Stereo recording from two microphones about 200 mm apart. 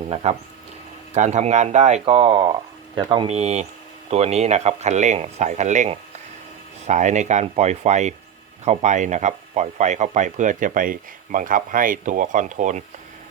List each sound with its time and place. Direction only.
0.1 s speech: 30° right (ahead or behind)